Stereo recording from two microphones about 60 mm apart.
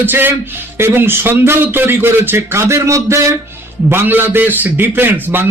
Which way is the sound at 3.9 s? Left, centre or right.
Right.